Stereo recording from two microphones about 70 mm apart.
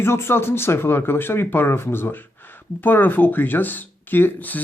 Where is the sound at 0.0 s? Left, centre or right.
Left.